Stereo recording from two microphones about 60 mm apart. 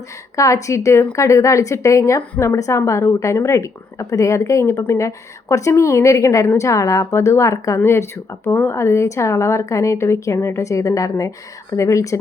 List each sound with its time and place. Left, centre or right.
0.3 s a woman's voice: left
7.8 s a woman's voice: left